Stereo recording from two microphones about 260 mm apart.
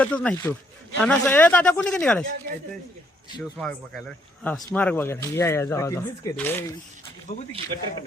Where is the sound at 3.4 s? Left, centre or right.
Centre.